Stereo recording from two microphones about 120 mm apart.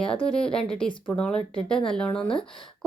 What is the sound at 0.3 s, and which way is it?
Speech, 5° left (ahead or behind).